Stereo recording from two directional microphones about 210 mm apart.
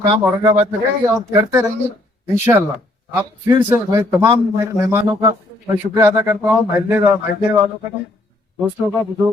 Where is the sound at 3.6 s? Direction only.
10° right (ahead or behind).